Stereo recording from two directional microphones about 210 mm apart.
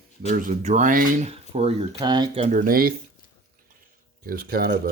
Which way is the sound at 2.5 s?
40° right (ahead or behind).